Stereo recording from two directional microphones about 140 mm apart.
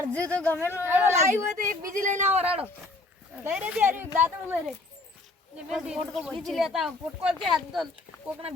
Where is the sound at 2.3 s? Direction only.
45° right (ahead or behind).